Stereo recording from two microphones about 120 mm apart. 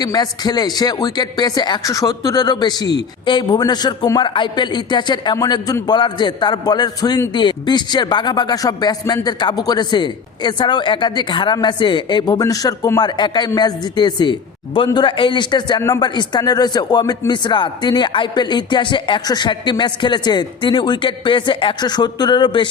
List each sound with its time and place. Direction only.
0.0 s a man's voice: 35° left (ahead or behind)